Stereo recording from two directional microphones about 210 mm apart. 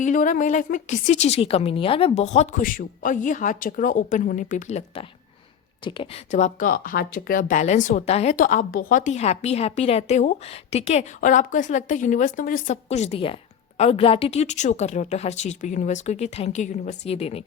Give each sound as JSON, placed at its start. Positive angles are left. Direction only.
{"t": 0.0, "sound": "speech", "side_deg": 40}
{"t": 5.8, "sound": "speech", "side_deg": 25}